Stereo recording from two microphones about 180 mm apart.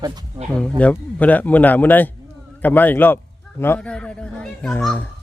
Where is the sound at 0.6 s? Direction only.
5° left (ahead or behind).